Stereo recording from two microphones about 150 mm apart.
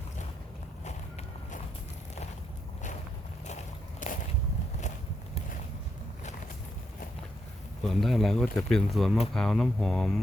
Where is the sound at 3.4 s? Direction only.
50° left (ahead or behind).